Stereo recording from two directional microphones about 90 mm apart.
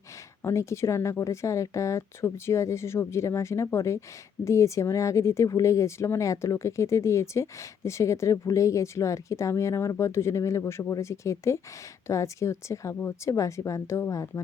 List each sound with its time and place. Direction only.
0.4 s speech: 30° left (ahead or behind)